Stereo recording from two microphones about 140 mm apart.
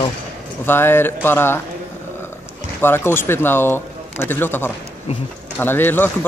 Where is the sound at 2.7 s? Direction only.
15° left (ahead or behind).